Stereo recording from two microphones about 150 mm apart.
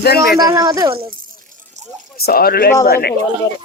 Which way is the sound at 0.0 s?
90° left.